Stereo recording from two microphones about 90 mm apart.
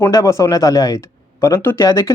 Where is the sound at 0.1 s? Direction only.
35° left (ahead or behind).